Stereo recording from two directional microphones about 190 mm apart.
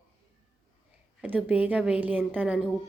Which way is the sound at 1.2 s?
5° right (ahead or behind).